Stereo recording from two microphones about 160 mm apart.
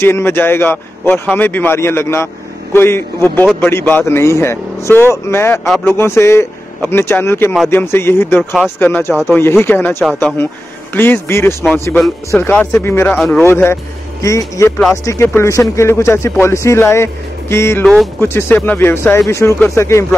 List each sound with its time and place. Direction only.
0.0 s a man's voice: 15° left (ahead or behind)